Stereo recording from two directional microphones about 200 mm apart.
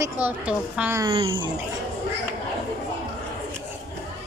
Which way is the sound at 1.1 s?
25° right (ahead or behind).